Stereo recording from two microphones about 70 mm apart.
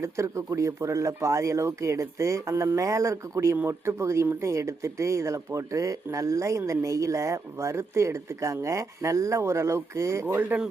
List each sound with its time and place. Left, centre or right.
0.0 s speech: right